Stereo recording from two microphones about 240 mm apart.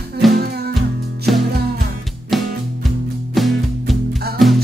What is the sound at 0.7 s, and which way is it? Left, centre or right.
Music, centre.